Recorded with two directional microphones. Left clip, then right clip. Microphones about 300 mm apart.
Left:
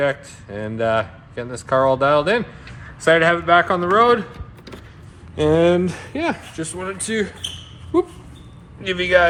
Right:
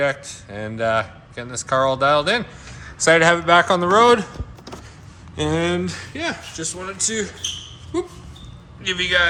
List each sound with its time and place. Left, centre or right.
0.0 s a man's voice: centre
3.1 s speech: centre
5.4 s speech: centre; by 7.3 s left
8.8 s a man's voice: centre